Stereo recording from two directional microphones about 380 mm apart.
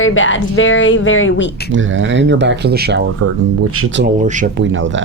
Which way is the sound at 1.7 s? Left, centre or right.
Right.